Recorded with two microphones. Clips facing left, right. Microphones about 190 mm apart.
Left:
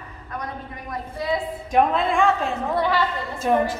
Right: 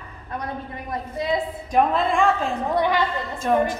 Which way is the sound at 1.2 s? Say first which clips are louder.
Right 1 dB; 20° right (ahead or behind).